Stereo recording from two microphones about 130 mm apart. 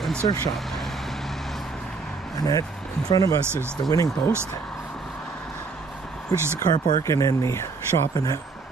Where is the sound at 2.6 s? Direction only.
5° left (ahead or behind).